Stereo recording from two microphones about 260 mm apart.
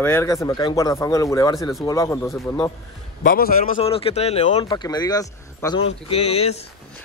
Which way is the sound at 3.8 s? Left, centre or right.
Left.